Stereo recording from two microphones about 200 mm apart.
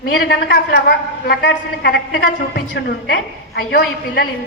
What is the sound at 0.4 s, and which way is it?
A woman's voice, 55° left (ahead or behind).